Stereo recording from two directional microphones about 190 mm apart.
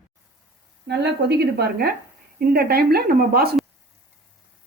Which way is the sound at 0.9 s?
60° right (ahead or behind).